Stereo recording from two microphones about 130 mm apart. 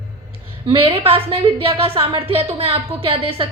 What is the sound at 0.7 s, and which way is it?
A woman's voice, 45° right (ahead or behind).